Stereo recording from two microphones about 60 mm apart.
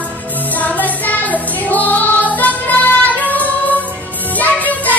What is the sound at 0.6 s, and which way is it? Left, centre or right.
Music, left.